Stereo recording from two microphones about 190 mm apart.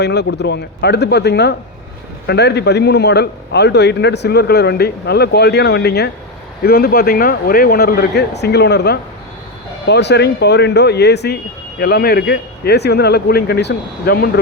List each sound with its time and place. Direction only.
0.0 s a man's voice: 60° left (ahead or behind)